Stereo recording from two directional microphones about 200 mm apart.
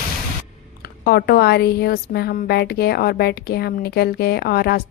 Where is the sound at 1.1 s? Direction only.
50° left (ahead or behind).